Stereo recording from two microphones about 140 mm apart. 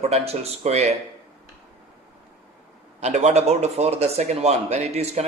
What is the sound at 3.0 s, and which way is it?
Speech, 55° right (ahead or behind).